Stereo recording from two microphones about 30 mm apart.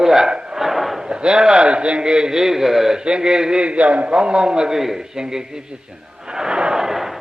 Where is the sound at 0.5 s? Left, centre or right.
Centre.